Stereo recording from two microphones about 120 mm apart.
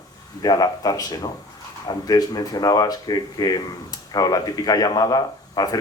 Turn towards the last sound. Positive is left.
turn(degrees=35)  # may be behind; listen again after turning